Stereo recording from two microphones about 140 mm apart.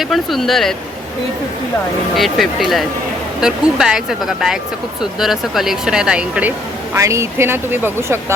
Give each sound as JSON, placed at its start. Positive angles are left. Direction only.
{"t": 0.0, "sound": "speech", "side_deg": 0}
{"t": 2.1, "sound": "speech", "side_deg": 0}
{"t": 6.9, "sound": "speech", "side_deg": -20}